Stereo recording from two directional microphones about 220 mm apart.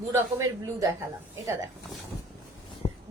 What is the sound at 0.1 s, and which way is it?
Speech, 15° right (ahead or behind).